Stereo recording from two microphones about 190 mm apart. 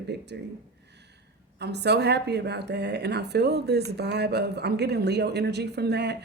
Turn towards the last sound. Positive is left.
turn(degrees=-60)  # may be behind; listen again after turning